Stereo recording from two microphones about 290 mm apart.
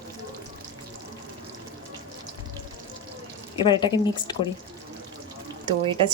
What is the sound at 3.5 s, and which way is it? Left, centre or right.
Speech, centre.